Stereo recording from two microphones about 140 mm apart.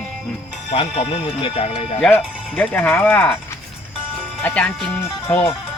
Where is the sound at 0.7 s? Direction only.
35° left (ahead or behind).